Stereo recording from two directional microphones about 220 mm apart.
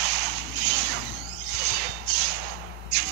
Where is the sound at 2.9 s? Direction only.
45° right (ahead or behind).